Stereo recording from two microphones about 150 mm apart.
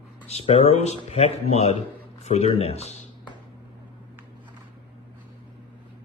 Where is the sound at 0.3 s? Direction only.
45° left (ahead or behind).